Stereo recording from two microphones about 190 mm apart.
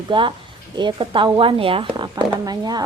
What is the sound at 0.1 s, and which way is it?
Speech, 25° right (ahead or behind).